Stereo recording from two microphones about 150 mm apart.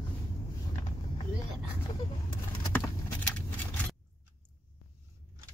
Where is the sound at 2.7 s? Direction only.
10° left (ahead or behind).